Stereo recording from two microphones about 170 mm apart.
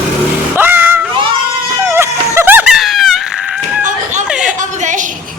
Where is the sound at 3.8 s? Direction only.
45° right (ahead or behind).